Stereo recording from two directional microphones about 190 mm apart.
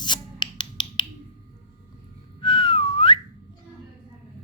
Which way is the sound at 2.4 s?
25° left (ahead or behind).